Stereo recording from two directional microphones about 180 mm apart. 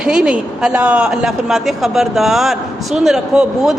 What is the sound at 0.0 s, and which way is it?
A woman's voice, 5° right (ahead or behind).